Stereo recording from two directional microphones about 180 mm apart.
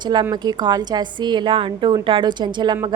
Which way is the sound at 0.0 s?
25° right (ahead or behind).